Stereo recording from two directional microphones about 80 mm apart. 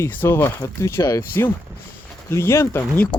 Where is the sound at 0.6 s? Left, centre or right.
Left.